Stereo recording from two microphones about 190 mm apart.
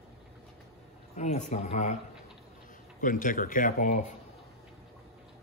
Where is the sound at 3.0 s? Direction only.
45° left (ahead or behind).